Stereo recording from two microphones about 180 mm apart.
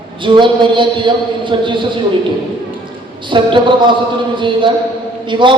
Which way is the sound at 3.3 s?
25° right (ahead or behind).